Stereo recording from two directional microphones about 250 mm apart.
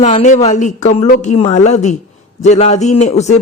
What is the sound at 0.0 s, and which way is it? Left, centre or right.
Speech, left.